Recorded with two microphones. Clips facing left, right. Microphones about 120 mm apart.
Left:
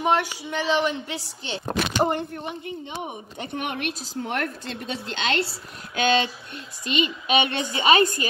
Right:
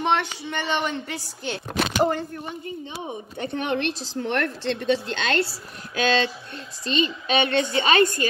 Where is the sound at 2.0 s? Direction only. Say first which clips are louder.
Right 1 dB; 20° left (ahead or behind).